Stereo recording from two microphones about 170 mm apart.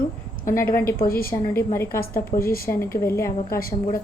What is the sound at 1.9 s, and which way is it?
Speech, 60° left (ahead or behind).